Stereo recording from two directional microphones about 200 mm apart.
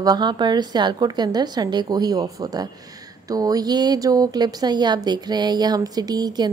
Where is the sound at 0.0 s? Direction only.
20° right (ahead or behind).